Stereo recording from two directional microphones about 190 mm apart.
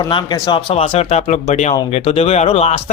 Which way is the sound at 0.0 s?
20° left (ahead or behind).